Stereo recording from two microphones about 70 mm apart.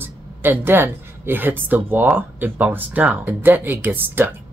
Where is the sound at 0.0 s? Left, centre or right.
Right.